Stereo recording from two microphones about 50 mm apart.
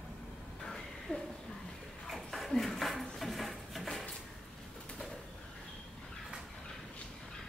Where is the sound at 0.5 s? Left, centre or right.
Centre.